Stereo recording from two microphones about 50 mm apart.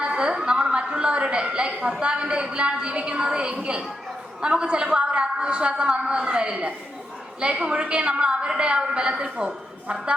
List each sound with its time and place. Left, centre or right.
0.0 s a woman's voice: centre